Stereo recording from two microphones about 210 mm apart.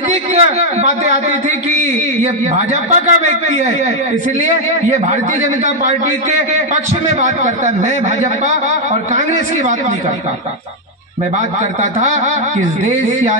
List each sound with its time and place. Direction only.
0.4 s a man's voice: 30° right (ahead or behind)
2.5 s a man's voice: 35° right (ahead or behind)
6.7 s a man's voice: 35° right (ahead or behind)